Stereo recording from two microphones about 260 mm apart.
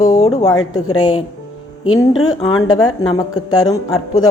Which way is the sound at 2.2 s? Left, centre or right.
Centre.